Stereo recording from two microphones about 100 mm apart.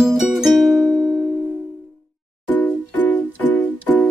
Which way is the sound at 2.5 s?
15° left (ahead or behind).